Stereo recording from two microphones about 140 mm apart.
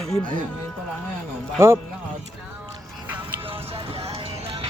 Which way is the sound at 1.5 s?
20° right (ahead or behind).